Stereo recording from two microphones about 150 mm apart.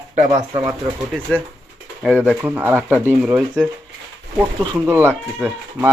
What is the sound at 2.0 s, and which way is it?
Speech, 10° right (ahead or behind).